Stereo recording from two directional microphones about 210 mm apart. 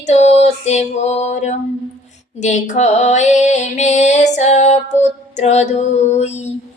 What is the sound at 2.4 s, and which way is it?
Female singing, 35° left (ahead or behind).